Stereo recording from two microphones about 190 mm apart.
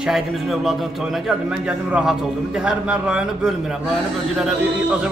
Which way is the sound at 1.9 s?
5° right (ahead or behind).